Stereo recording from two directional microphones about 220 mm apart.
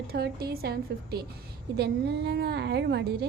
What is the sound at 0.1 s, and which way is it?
A woman's voice, 45° right (ahead or behind).